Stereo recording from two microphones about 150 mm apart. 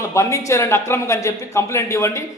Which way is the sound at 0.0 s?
20° left (ahead or behind).